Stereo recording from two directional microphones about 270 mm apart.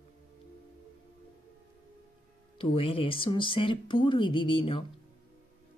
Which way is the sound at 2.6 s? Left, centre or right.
Centre.